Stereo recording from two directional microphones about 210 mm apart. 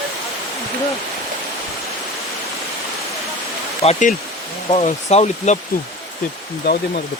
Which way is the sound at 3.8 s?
35° left (ahead or behind).